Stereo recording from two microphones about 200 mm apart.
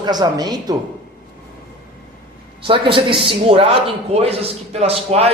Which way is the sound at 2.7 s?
25° right (ahead or behind).